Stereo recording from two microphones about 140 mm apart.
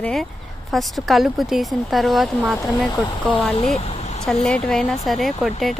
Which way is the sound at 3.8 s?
50° left (ahead or behind).